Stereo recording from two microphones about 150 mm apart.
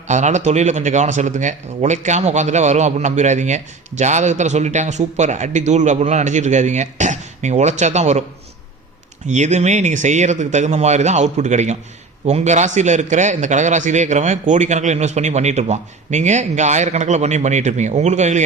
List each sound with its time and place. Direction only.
0.1 s speech: 50° right (ahead or behind)
9.2 s speech: 50° right (ahead or behind)